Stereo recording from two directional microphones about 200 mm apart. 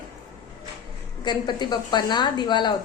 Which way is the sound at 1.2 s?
20° left (ahead or behind).